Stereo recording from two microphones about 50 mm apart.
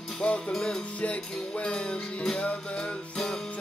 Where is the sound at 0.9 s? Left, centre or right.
Left.